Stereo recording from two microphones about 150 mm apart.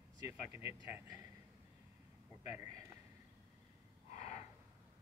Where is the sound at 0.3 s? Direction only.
15° right (ahead or behind).